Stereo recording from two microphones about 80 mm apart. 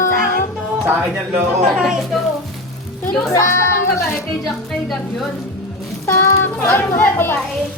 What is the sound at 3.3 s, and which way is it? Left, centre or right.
Speech, left.